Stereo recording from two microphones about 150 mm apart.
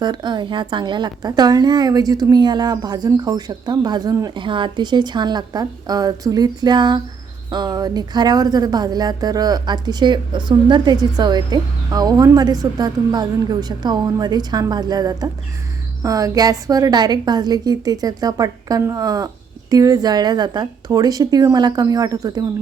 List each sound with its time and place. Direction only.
0.0 s speech: 30° right (ahead or behind)